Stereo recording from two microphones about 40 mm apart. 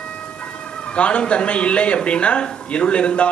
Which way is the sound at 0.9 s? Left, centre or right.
Left.